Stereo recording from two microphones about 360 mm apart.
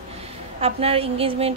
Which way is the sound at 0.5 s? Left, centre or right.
Centre.